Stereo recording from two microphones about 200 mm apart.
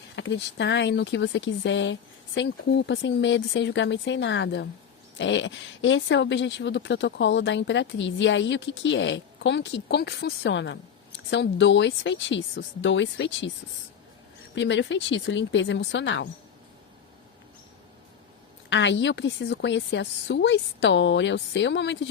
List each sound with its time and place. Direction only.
0.2 s speech: 60° left (ahead or behind)
14.5 s speech: 65° left (ahead or behind)
18.7 s speech: 65° left (ahead or behind)